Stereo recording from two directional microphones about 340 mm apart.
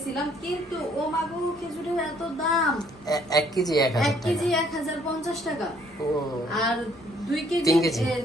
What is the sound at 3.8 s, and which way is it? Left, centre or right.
A woman's voice, centre.